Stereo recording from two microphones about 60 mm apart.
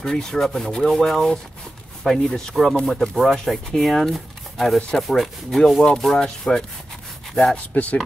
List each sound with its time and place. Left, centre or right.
0.0 s speech: centre
7.5 s speech: left